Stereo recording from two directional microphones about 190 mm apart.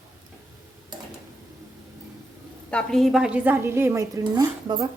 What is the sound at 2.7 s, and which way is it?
A woman's voice, centre (ahead or behind).